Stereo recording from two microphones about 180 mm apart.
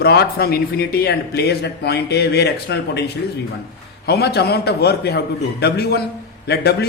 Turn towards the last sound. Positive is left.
turn(degrees=65)  # may be behind; listen again after turning